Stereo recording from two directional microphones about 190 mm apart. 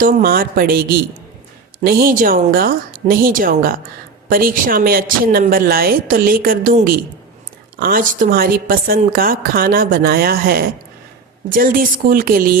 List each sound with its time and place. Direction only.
0.0 s a woman's voice: 50° right (ahead or behind)